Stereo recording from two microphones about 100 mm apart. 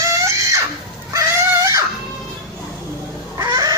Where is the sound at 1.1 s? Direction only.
35° right (ahead or behind).